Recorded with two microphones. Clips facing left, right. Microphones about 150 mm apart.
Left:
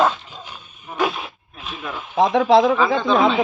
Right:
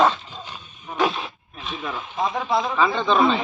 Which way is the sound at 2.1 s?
85° left.